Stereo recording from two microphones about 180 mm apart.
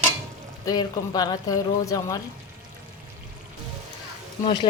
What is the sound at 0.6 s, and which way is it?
A woman's voice, 20° left (ahead or behind).